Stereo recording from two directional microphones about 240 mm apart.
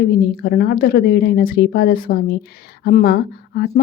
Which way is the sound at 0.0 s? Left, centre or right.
Left.